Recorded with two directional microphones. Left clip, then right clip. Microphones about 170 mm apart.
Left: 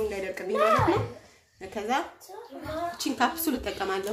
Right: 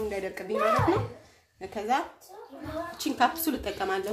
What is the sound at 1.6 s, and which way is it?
Speech, 20° right (ahead or behind).